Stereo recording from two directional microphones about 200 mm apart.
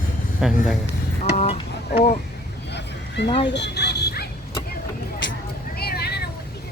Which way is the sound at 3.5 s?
60° left (ahead or behind).